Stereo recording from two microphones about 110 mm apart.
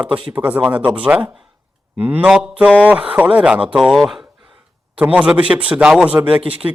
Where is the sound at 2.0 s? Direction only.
15° right (ahead or behind).